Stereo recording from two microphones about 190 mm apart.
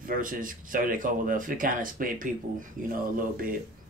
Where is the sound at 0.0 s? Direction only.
45° right (ahead or behind).